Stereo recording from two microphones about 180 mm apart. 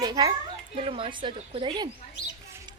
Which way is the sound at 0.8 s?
30° right (ahead or behind).